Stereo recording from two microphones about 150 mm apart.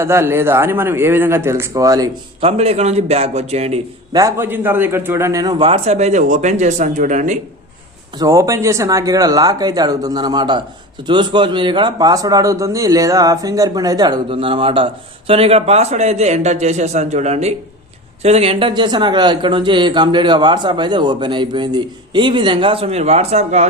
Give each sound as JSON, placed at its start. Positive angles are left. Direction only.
{"t": 0.0, "sound": "a man's voice", "side_deg": -15}
{"t": 2.4, "sound": "a man's voice", "side_deg": -40}
{"t": 4.1, "sound": "a man's voice", "side_deg": -20}
{"t": 8.2, "sound": "a man's voice", "side_deg": -20}